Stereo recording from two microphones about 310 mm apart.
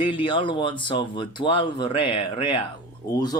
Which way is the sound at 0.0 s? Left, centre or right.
Centre.